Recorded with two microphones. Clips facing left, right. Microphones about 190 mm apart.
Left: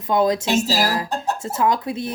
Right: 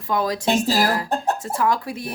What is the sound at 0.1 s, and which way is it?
Speech, 25° left (ahead or behind).